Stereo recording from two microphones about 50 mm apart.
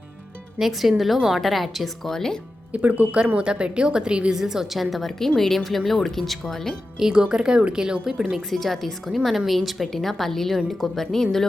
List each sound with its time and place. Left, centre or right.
0.6 s speech: centre
2.7 s a woman's voice: right; by 6.7 s centre
7.0 s a woman's voice: centre
8.4 s a woman's voice: centre